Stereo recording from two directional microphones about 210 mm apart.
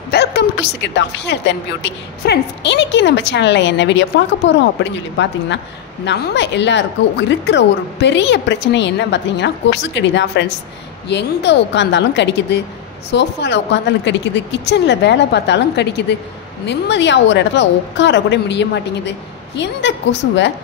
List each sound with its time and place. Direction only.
0.1 s a woman's voice: 50° left (ahead or behind)